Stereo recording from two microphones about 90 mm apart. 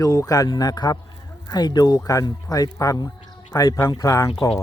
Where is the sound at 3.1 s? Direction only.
35° left (ahead or behind).